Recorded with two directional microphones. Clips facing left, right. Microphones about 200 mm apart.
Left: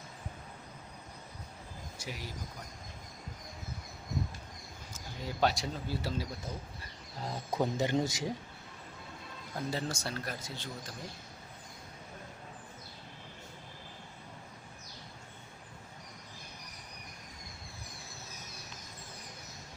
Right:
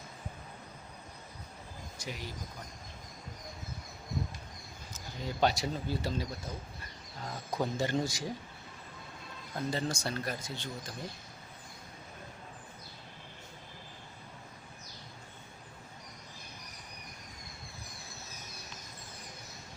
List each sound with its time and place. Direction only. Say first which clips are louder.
2.0 s speech: right 1 dB; 5° left (ahead or behind)
4.9 s speech: right 2 dB; 5° left (ahead or behind)
7.2 s speech: left 2 dB; 30° left (ahead or behind)
7.6 s a man's voice: left 1 dB; 20° left (ahead or behind)
9.6 s speech: right 2 dB; 5° left (ahead or behind)